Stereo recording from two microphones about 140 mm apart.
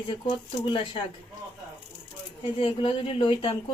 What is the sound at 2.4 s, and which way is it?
Speech, 35° left (ahead or behind).